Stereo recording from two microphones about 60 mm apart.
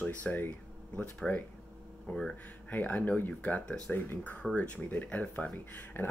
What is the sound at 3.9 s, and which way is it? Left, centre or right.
Speech, left.